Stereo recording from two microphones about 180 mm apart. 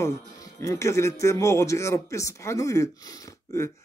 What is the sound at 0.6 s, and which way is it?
Speech, 15° left (ahead or behind).